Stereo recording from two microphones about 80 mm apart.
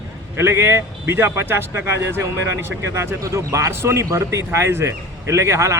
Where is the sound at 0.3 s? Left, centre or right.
Right.